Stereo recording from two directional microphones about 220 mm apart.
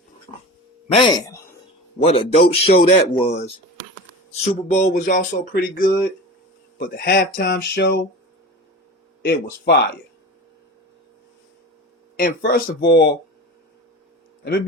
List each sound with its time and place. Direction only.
0.3 s dog: 15° left (ahead or behind)
0.9 s speech: 20° left (ahead or behind); by 8.0 s 50° left (ahead or behind)
9.2 s speech: 45° left (ahead or behind)
12.1 s speech: 45° left (ahead or behind)